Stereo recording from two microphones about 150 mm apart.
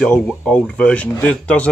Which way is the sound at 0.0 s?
5° left (ahead or behind).